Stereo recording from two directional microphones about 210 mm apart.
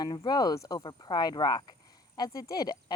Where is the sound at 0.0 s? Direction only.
20° left (ahead or behind).